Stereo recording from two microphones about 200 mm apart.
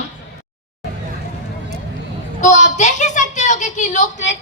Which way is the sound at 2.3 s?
35° left (ahead or behind).